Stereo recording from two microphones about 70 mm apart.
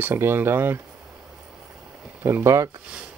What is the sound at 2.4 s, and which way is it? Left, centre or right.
Speech, right.